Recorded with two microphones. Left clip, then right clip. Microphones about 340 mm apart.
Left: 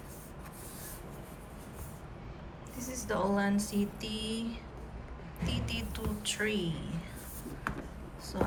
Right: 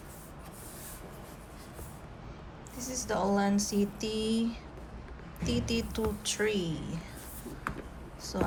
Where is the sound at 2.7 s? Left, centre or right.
Centre.